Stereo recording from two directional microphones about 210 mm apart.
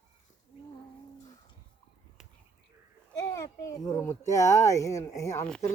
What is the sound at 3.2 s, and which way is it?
A child's voice, 15° left (ahead or behind).